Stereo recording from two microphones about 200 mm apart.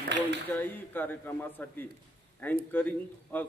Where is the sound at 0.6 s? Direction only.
10° left (ahead or behind).